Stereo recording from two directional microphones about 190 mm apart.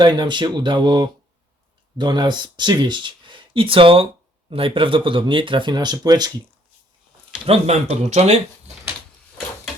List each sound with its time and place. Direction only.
0.0 s speech: 25° right (ahead or behind)
7.4 s speech: 30° right (ahead or behind)